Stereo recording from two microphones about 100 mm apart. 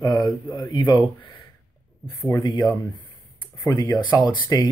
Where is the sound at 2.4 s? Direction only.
45° left (ahead or behind).